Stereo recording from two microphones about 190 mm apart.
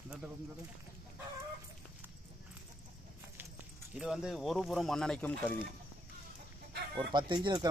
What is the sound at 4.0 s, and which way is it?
Speech, 5° right (ahead or behind).